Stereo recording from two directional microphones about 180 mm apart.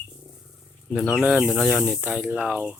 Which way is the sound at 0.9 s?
Centre (ahead or behind).